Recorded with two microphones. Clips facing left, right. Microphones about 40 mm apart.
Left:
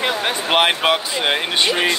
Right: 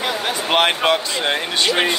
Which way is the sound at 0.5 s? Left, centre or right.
Centre.